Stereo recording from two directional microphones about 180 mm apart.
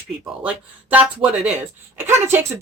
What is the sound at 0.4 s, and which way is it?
Speech, 5° right (ahead or behind).